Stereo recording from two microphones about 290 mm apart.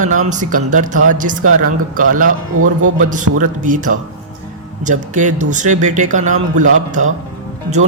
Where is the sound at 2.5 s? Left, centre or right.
Right.